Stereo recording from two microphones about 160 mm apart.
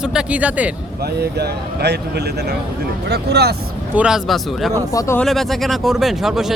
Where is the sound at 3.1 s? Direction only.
90° right.